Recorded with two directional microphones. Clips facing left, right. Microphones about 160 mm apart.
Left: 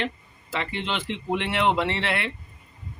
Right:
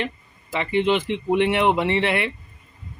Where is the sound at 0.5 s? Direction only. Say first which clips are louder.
Right 9 dB; 15° right (ahead or behind).